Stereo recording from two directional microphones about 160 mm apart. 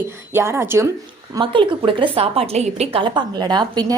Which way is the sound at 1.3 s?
30° right (ahead or behind).